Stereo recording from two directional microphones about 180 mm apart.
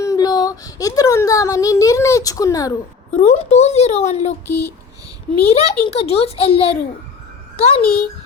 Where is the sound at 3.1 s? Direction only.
35° left (ahead or behind).